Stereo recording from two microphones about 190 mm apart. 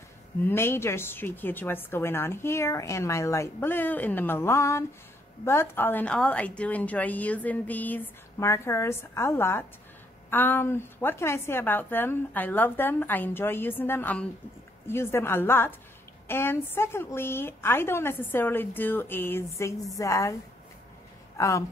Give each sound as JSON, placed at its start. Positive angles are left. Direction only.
{"t": 0.5, "sound": "a woman's voice", "side_deg": 15}
{"t": 21.4, "sound": "a woman's voice", "side_deg": 15}